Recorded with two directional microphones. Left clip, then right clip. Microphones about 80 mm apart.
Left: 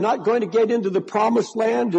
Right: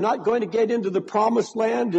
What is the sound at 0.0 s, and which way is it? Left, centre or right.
A man's voice, right.